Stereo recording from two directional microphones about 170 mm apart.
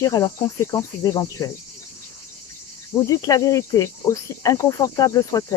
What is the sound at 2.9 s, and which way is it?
Cricket, 20° left (ahead or behind).